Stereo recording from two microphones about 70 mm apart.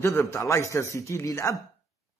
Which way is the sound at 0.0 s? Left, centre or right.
Left.